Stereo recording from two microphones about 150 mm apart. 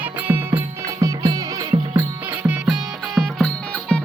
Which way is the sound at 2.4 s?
5° right (ahead or behind).